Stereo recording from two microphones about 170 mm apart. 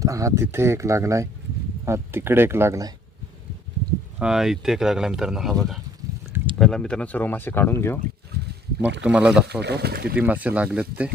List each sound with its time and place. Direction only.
0.0 s speech: 20° right (ahead or behind)
4.2 s speech: 5° right (ahead or behind); by 7.9 s 15° left (ahead or behind)
9.0 s speech: 5° right (ahead or behind)
9.5 s speech: 75° right (ahead or behind)
10.2 s speech: 10° right (ahead or behind)